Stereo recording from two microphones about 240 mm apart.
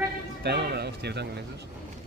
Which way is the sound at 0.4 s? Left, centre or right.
Right.